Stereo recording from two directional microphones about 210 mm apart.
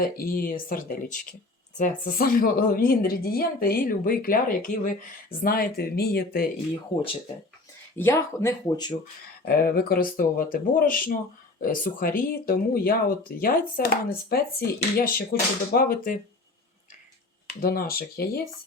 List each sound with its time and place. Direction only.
0.3 s speech: 45° left (ahead or behind)
7.9 s speech: 10° left (ahead or behind)
9.4 s speech: 45° left (ahead or behind)
17.5 s speech: 45° left (ahead or behind)